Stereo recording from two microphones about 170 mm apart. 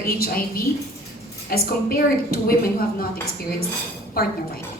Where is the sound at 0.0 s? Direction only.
60° left (ahead or behind).